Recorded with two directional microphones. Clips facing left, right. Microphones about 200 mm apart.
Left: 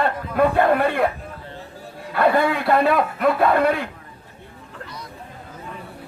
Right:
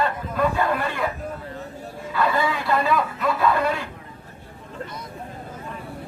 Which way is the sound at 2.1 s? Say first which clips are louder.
Left 5 dB; 60° left (ahead or behind).